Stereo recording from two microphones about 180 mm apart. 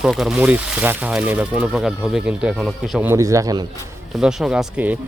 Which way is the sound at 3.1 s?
15° right (ahead or behind).